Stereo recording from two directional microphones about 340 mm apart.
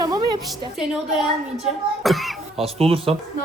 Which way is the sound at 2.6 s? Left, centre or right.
Centre.